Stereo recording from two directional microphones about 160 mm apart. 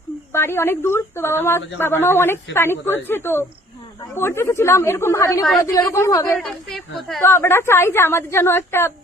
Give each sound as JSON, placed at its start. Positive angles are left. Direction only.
{"t": 0.3, "sound": "a woman's voice", "side_deg": 15}
{"t": 6.4, "sound": "a woman's voice", "side_deg": 0}
{"t": 7.2, "sound": "a woman's voice", "side_deg": 15}